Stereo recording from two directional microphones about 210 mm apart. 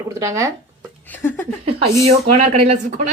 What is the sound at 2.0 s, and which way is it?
Speech, 30° right (ahead or behind).